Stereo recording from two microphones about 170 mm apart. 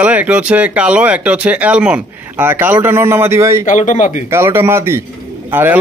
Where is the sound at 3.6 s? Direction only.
45° left (ahead or behind).